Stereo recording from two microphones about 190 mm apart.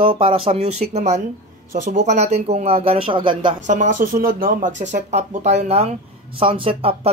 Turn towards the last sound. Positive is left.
turn(degrees=-30)  # may be behind; listen again after turning